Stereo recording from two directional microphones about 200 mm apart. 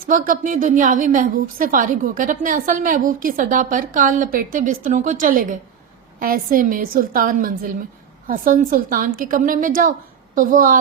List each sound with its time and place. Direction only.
0.0 s a woman's voice: 45° right (ahead or behind)